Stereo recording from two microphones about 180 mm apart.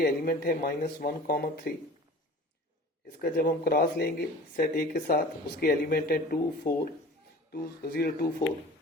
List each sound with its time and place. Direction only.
0.0 s speech: 55° left (ahead or behind)
3.2 s speech: 60° left (ahead or behind)